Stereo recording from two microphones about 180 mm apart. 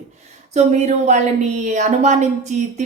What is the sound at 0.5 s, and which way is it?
A woman's voice, 40° right (ahead or behind).